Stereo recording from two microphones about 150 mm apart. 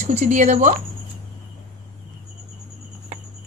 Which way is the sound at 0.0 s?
60° right (ahead or behind).